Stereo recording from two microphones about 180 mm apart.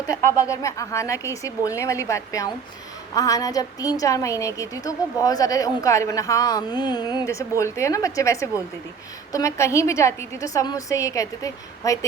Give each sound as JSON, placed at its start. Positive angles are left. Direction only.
{"t": 0.6, "sound": "a woman's voice", "side_deg": 15}